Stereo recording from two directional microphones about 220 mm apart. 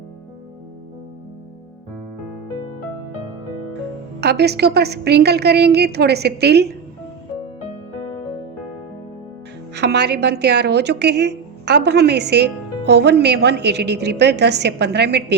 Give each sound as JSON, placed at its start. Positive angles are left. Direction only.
{"t": 4.2, "sound": "speech", "side_deg": -50}
{"t": 9.7, "sound": "speech", "side_deg": -50}